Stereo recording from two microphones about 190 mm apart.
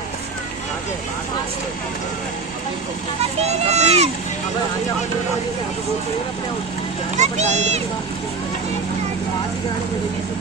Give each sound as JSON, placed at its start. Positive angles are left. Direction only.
{"t": 3.5, "sound": "speech", "side_deg": -35}
{"t": 7.2, "sound": "speech", "side_deg": -35}